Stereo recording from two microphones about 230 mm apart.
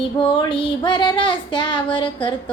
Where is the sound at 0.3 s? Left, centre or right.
Left.